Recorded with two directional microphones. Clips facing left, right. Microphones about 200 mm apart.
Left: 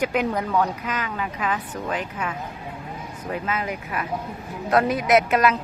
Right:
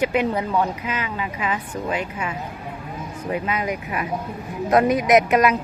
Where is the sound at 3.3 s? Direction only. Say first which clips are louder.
Right 3 dB; 15° right (ahead or behind).